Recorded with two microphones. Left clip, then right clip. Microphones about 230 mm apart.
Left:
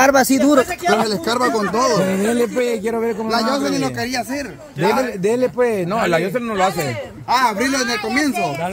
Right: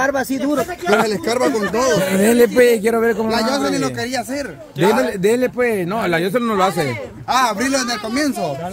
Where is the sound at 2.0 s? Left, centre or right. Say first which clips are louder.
Right 4 dB; right.